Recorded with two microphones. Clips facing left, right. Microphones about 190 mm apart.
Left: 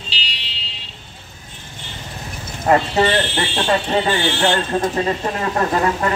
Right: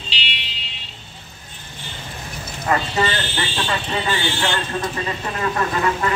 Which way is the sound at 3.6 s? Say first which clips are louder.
Left 8 dB; 40° left (ahead or behind).